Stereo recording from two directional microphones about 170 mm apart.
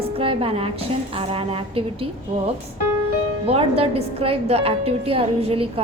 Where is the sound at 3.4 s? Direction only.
35° right (ahead or behind).